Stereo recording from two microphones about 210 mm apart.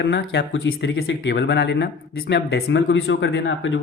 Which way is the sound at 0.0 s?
60° left (ahead or behind).